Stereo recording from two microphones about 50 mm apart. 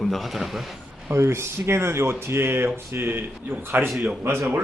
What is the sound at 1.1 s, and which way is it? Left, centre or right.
A man's voice, right.